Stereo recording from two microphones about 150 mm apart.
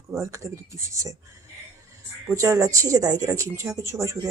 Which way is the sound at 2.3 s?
20° right (ahead or behind).